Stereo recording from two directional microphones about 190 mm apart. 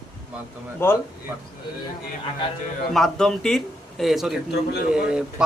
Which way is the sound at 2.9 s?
Centre (ahead or behind).